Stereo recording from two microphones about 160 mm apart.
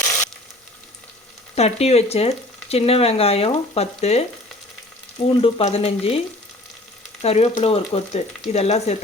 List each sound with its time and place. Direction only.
1.5 s speech: 40° left (ahead or behind)
5.4 s speech: 40° left (ahead or behind)